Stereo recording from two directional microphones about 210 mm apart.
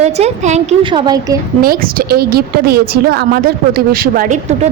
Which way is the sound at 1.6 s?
45° right (ahead or behind).